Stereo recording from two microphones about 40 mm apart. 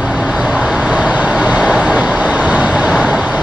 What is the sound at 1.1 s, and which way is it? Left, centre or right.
Vehicle, right.